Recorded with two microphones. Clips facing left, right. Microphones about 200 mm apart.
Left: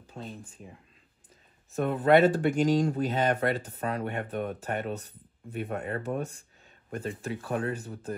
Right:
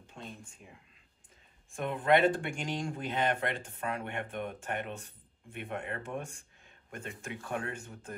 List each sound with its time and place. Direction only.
0.0 s speech: 35° left (ahead or behind)
1.8 s speech: 40° left (ahead or behind)